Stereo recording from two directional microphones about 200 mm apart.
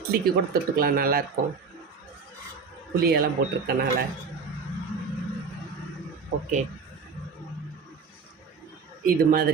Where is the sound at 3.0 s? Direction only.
50° right (ahead or behind).